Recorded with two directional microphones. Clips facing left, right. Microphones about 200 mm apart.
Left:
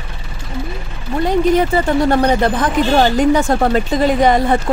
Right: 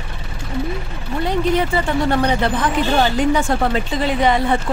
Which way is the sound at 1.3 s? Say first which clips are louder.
Left 5 dB; 45° left (ahead or behind).